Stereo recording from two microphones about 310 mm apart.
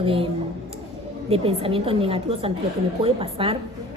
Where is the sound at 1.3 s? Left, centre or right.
Centre.